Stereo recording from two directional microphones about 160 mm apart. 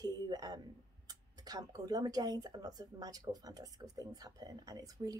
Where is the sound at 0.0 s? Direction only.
25° right (ahead or behind).